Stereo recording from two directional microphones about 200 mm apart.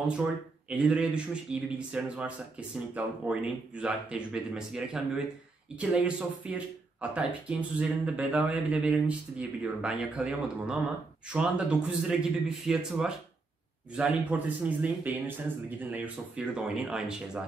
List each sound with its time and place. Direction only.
0.1 s speech: 5° right (ahead or behind)